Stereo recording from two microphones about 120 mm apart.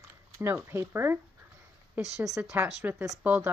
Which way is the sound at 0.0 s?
25° right (ahead or behind).